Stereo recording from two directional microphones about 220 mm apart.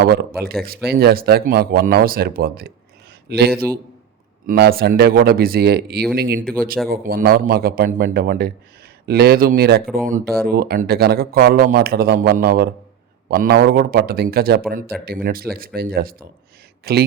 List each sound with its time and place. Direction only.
0.0 s speech: 45° right (ahead or behind)